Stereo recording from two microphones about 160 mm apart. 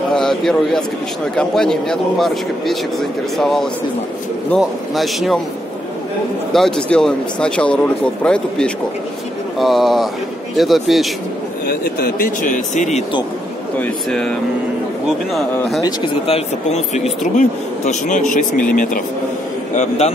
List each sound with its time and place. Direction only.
0.1 s speech: centre (ahead or behind)
6.5 s speech: 5° left (ahead or behind)
11.6 s speech: 70° left (ahead or behind); by 13.0 s 50° left (ahead or behind)
13.7 s speech: 5° left (ahead or behind)
15.8 s speech: 35° left (ahead or behind)